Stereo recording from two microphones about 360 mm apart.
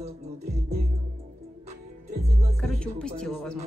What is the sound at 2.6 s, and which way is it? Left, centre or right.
Speech, centre.